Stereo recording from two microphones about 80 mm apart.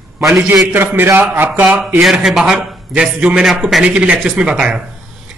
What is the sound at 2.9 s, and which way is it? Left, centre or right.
A man's voice, centre.